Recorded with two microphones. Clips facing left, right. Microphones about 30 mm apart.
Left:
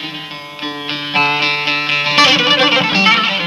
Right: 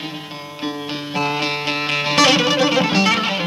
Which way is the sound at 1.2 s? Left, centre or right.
Left.